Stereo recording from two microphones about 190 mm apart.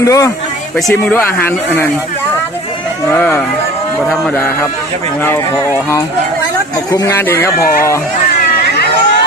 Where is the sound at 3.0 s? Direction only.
10° left (ahead or behind).